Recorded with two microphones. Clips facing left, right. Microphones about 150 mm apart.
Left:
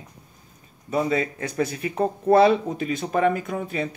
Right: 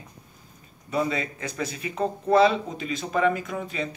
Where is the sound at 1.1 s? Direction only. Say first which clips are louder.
Left 6 dB; 50° left (ahead or behind).